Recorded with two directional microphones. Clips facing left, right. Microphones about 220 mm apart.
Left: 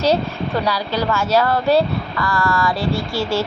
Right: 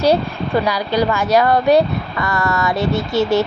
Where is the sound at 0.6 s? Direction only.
15° right (ahead or behind).